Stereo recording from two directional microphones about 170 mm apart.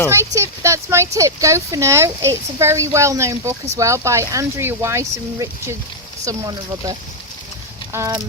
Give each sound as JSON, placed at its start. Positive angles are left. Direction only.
{"t": 0.1, "sound": "speech", "side_deg": -15}
{"t": 7.9, "sound": "speech", "side_deg": -15}